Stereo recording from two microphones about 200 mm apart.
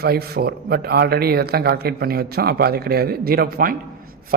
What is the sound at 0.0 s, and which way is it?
Speech, 50° right (ahead or behind).